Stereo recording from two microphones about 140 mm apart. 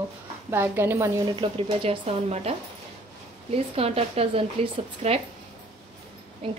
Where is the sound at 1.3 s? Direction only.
40° right (ahead or behind).